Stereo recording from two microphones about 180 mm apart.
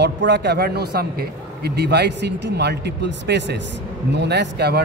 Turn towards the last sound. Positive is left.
turn(degrees=-65)  # may be behind; listen again after turning